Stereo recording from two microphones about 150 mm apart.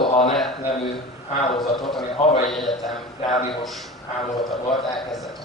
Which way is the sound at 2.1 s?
40° left (ahead or behind).